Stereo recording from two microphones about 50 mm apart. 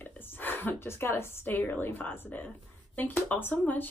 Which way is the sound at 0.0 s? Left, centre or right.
Left.